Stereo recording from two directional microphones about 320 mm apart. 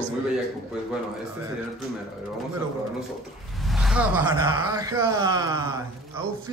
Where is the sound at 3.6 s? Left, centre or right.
Centre.